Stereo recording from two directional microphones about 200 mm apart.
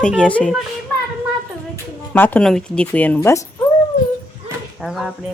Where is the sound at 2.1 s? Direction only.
10° left (ahead or behind).